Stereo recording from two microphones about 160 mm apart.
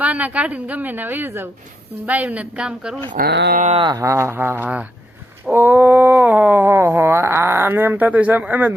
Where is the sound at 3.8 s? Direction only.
20° right (ahead or behind).